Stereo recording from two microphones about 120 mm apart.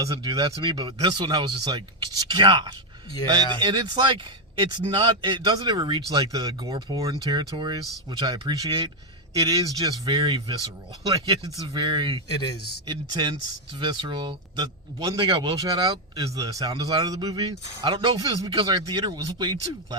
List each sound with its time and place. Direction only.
0.0 s speech: 35° right (ahead or behind)
12.3 s a man's voice: 35° left (ahead or behind)
13.2 s speech: 45° right (ahead or behind)
15.6 s speech: 30° right (ahead or behind)